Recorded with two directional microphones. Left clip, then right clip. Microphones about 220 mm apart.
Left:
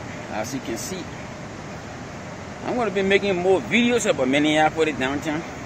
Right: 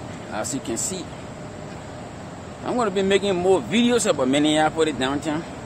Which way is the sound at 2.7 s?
15° right (ahead or behind).